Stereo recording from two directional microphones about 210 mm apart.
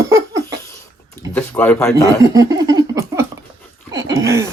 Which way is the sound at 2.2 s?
15° right (ahead or behind).